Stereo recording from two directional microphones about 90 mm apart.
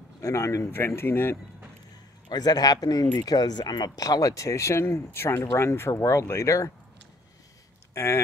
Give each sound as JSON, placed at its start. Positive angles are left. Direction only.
{"t": 0.2, "sound": "speech", "side_deg": 35}
{"t": 2.2, "sound": "speech", "side_deg": 50}
{"t": 7.9, "sound": "speech", "side_deg": 30}